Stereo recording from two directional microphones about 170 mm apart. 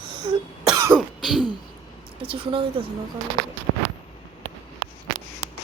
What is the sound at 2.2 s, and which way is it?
Speech, 30° right (ahead or behind).